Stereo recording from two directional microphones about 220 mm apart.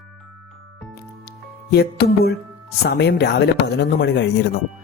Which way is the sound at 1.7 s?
45° left (ahead or behind).